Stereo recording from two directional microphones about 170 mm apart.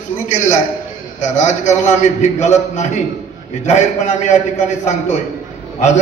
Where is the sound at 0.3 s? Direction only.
45° left (ahead or behind).